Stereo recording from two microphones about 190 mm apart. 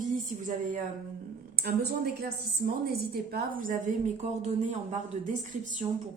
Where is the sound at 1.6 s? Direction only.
55° right (ahead or behind).